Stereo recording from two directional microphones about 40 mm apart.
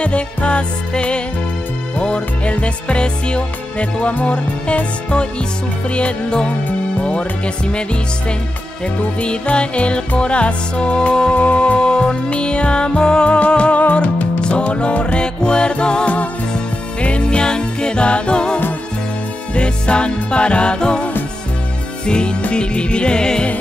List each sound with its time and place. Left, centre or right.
0.0 s music: left
9.2 s music: left
11.8 s music: left